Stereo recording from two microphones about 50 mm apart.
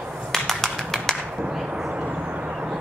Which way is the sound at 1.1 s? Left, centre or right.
Centre.